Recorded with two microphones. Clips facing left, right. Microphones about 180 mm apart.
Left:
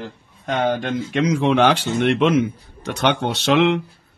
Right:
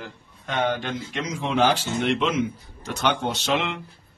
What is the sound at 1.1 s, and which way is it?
Speech, 65° left (ahead or behind).